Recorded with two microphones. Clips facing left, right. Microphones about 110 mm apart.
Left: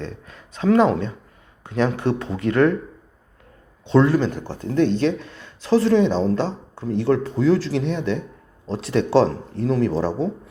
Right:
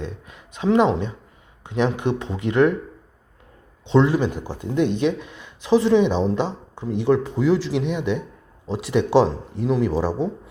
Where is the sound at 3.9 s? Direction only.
20° right (ahead or behind).